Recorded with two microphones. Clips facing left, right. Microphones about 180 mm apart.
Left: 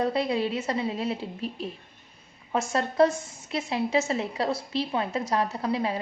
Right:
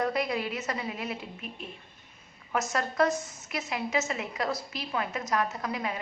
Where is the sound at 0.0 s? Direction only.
30° left (ahead or behind).